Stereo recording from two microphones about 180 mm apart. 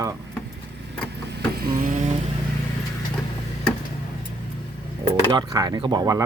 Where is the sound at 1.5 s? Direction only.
55° right (ahead or behind).